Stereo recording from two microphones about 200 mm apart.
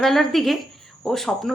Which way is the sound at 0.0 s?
Centre (ahead or behind).